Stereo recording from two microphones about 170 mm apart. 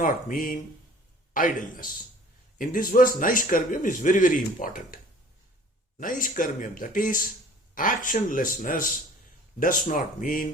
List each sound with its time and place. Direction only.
0.0 s a man's voice: 55° left (ahead or behind)
6.0 s a man's voice: 50° left (ahead or behind)